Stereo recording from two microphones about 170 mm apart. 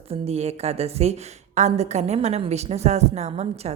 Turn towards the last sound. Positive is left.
turn(degrees=-40)  # may be behind; listen again after turning